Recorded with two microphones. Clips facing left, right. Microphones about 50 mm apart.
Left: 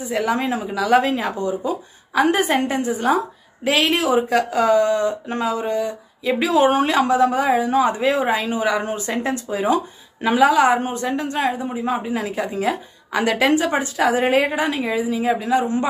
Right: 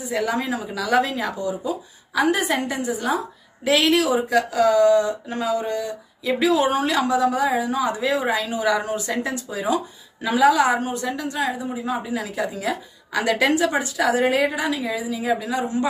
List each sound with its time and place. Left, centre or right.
0.0 s speech: left